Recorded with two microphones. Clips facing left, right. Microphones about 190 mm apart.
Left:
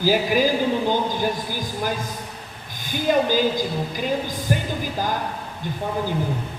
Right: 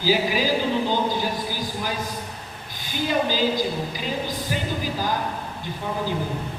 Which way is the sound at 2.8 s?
50° left (ahead or behind).